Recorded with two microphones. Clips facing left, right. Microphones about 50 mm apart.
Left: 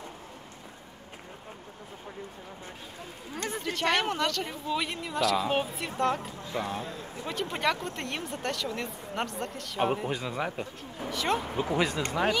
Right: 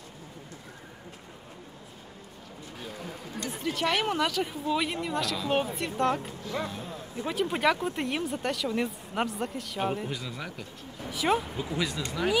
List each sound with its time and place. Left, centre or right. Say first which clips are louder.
3.5 s a sound: right 2 dB; centre
3.9 s speech: even; centre
10.0 s speech: left 5 dB; left
11.1 s speech: right 2 dB; centre
11.6 s speech: left 4 dB; left